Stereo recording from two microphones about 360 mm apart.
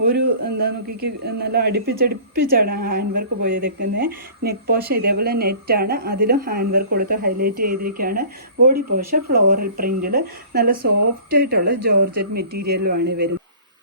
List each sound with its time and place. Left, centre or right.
0.1 s a woman's voice: right